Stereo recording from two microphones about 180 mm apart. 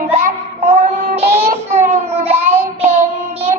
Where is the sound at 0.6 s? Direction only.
35° right (ahead or behind).